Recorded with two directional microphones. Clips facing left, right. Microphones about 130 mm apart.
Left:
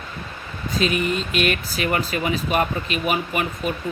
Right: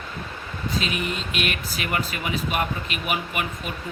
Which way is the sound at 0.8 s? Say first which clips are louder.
Left 6 dB; 40° left (ahead or behind).